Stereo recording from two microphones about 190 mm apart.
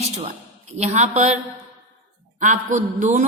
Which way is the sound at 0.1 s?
35° right (ahead or behind).